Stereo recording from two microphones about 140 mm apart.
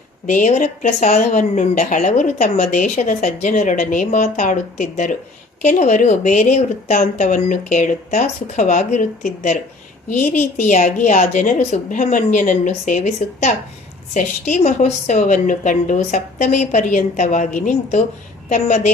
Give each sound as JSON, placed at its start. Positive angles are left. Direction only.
{"t": 0.3, "sound": "a woman's voice", "side_deg": 60}